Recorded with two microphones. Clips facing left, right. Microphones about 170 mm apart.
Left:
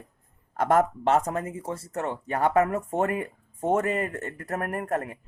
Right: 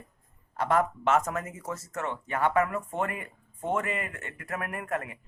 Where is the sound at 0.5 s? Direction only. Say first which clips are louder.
Left 4 dB; 45° left (ahead or behind).